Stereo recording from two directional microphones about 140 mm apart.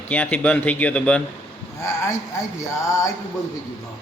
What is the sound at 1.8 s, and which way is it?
Speech, 20° left (ahead or behind).